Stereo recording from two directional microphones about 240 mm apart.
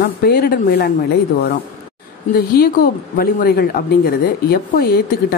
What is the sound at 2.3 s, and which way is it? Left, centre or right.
Speech, left.